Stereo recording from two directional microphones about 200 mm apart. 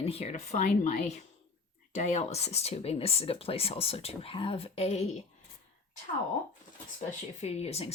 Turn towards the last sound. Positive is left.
turn(degrees=30)  # may be behind; listen again after turning